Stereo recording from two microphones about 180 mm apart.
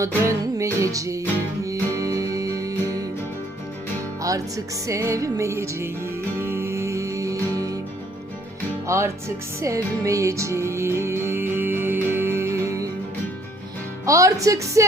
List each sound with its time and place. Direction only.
0.3 s music: 15° right (ahead or behind)
0.9 s speech: 15° right (ahead or behind)
1.6 s music: 20° right (ahead or behind)
4.2 s music: 20° right (ahead or behind)
8.9 s speech: 15° right (ahead or behind)
9.6 s music: 15° right (ahead or behind)
14.0 s speech: 15° right (ahead or behind)